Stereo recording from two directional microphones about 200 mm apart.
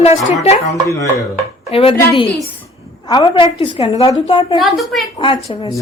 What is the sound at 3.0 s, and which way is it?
A woman's voice, 20° left (ahead or behind).